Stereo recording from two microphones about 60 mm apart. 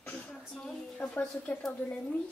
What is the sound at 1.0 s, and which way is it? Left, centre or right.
Speech, left.